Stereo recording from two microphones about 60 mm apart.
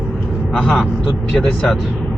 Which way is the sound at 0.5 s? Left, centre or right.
Left.